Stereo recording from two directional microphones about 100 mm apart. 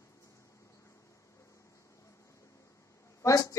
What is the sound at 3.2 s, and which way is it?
Speech, 35° left (ahead or behind).